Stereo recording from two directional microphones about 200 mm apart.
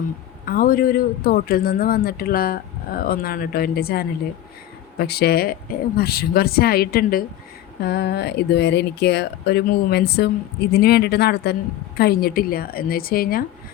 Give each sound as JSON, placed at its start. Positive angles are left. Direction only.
{"t": 0.4, "sound": "speech", "side_deg": 45}